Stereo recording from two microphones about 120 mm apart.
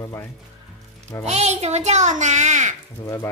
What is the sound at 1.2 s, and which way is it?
A child's voice, 65° right (ahead or behind).